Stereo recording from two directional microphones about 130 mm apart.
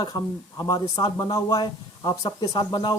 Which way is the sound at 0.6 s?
25° left (ahead or behind).